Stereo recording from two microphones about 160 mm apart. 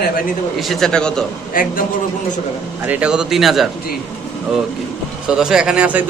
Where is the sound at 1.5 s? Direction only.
60° left (ahead or behind).